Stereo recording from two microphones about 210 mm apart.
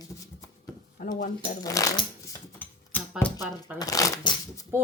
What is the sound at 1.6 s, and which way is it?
Speech, 15° left (ahead or behind).